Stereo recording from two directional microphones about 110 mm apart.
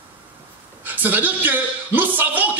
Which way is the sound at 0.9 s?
15° right (ahead or behind).